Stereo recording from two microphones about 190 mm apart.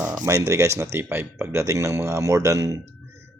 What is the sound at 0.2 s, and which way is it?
Speech, 15° right (ahead or behind).